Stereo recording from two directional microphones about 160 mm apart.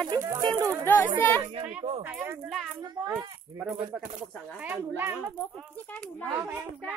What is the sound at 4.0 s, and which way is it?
Speech, 50° right (ahead or behind).